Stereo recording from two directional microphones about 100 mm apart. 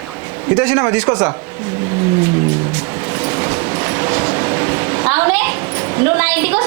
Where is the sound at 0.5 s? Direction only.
20° right (ahead or behind).